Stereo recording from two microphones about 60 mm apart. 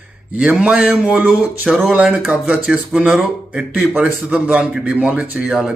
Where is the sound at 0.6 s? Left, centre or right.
Right.